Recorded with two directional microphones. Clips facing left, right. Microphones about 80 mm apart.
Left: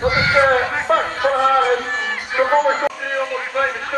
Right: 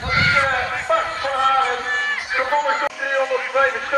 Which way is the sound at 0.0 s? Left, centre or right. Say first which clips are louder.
Left 4 dB; centre.